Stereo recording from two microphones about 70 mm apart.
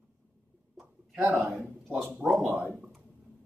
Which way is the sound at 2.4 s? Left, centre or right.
Right.